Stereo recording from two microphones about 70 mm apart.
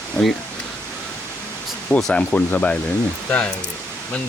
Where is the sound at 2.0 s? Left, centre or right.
Centre.